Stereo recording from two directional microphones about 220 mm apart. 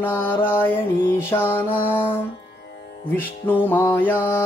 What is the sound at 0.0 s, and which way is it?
Music, 10° left (ahead or behind).